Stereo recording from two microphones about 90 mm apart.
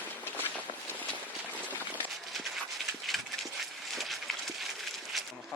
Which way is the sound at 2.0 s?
Centre (ahead or behind).